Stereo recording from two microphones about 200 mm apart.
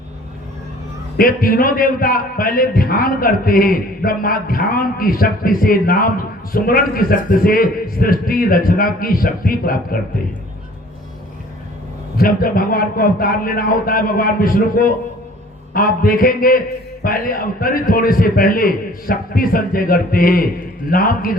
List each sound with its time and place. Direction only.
1.1 s a man's voice: 45° left (ahead or behind)
12.1 s a man's voice: 45° left (ahead or behind)